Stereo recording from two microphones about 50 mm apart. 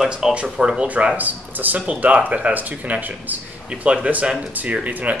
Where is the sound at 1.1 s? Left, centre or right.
Right.